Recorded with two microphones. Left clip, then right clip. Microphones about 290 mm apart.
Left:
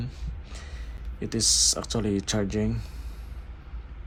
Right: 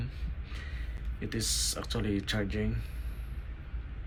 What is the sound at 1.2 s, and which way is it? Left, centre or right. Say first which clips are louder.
Speech: left 10 dB; centre.